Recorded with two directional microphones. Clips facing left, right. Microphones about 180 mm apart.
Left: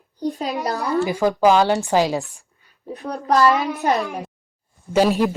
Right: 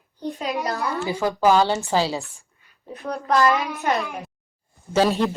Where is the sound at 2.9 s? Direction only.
35° left (ahead or behind).